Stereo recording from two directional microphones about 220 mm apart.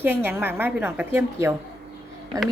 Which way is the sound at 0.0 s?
10° right (ahead or behind).